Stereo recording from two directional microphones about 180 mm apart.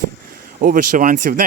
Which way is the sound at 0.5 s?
50° right (ahead or behind).